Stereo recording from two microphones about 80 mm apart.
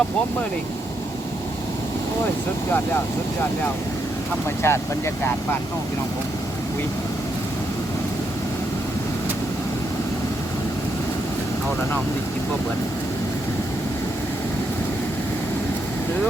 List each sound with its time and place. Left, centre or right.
4.6 s speech: left